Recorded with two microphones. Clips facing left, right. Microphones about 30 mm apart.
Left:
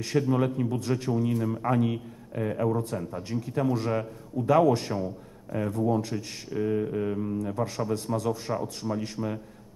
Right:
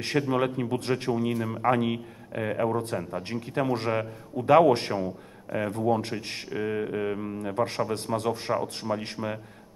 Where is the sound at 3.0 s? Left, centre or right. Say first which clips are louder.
Right 2 dB; right.